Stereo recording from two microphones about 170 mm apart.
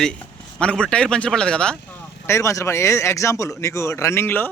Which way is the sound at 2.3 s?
15° left (ahead or behind).